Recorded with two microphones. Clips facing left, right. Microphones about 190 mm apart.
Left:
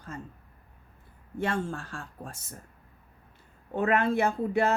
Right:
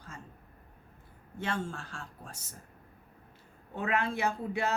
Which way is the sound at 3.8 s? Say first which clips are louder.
Left 6 dB; 50° left (ahead or behind).